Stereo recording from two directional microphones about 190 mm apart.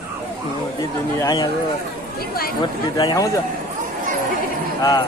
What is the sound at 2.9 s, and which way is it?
Speech, 20° left (ahead or behind).